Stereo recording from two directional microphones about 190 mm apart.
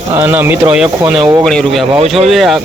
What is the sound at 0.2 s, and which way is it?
Speech, 10° right (ahead or behind).